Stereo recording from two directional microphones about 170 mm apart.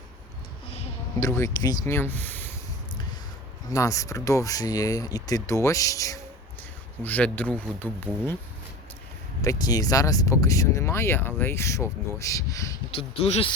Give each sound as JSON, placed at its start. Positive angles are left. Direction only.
{"t": 1.2, "sound": "speech", "side_deg": 15}
{"t": 3.7, "sound": "speech", "side_deg": 20}
{"t": 7.0, "sound": "speech", "side_deg": 10}
{"t": 9.4, "sound": "speech", "side_deg": 20}
{"t": 12.9, "sound": "speech", "side_deg": 35}